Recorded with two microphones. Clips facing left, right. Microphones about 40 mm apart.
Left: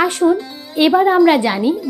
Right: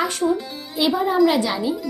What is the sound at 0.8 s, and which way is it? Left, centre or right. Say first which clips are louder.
Speech: left 8 dB; left.